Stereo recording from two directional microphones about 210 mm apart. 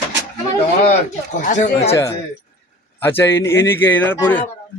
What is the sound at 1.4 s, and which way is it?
Speech, 35° left (ahead or behind).